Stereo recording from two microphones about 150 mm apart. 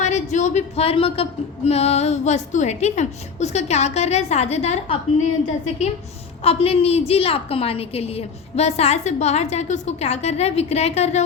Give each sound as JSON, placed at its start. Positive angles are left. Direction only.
{"t": 0.0, "sound": "speech", "side_deg": 50}
{"t": 6.4, "sound": "speech", "side_deg": 40}